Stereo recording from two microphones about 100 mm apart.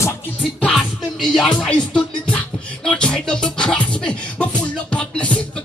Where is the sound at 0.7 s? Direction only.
5° left (ahead or behind).